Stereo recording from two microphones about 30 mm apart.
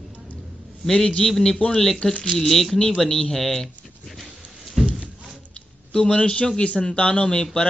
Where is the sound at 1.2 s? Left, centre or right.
Centre.